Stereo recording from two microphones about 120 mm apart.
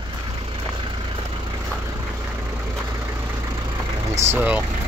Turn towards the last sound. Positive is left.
turn(degrees=-15)  # may be behind; listen again after turning